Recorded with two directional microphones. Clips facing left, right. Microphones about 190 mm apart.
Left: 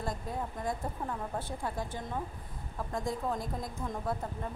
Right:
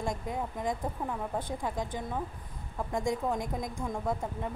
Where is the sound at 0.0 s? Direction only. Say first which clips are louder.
Right 3 dB; 15° right (ahead or behind).